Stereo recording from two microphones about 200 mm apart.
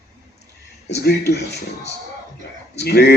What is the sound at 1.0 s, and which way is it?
A man's voice, 55° left (ahead or behind).